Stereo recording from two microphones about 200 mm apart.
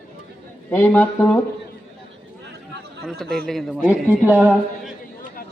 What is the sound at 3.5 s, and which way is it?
A woman's voice, centre (ahead or behind).